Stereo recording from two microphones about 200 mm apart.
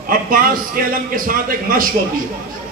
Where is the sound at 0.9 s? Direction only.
45° right (ahead or behind).